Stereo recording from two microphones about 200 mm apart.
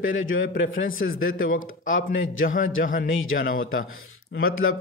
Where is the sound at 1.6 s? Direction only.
75° left (ahead or behind).